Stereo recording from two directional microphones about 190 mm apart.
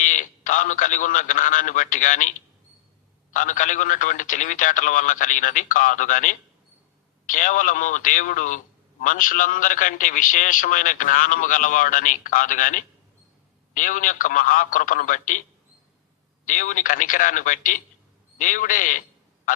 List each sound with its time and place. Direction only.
0.0 s a man's voice: 40° left (ahead or behind)
3.3 s a man's voice: 40° left (ahead or behind)
16.5 s a man's voice: 45° left (ahead or behind)